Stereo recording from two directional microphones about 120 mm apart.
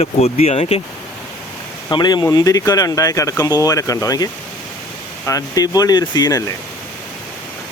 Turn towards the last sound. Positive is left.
turn(degrees=30)  # may be behind; listen again after turning